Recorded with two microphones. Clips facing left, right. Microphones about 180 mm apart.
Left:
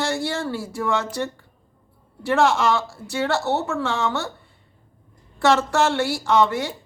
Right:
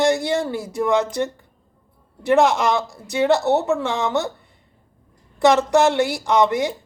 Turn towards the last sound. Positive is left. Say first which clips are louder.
# right 2 dB
turn(degrees=-15)  # may be behind; listen again after turning